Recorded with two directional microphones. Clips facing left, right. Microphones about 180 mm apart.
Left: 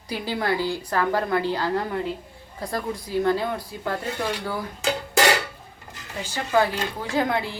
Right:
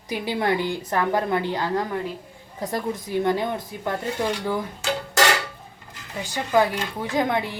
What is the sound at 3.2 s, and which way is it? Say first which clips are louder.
Speech: even; 15° right (ahead or behind).